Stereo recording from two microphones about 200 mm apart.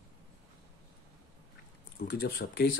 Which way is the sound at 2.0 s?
50° left (ahead or behind).